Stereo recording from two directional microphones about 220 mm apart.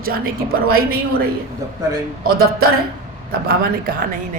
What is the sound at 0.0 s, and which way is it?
Speech, 40° right (ahead or behind).